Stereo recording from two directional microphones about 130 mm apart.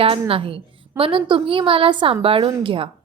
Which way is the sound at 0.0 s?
45° right (ahead or behind).